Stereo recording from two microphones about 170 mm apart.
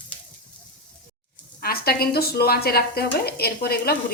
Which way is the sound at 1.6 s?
65° left (ahead or behind).